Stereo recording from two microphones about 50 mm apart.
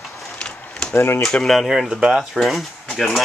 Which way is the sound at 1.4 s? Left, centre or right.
Centre.